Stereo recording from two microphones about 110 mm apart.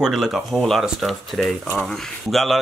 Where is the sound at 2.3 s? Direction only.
Centre (ahead or behind).